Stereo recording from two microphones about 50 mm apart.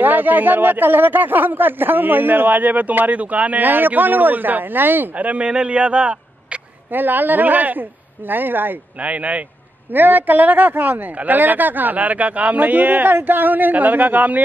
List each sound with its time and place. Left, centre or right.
0.0 s speech: right
5.1 s speech: right
6.9 s speech: right
9.0 s speech: right
9.9 s speech: right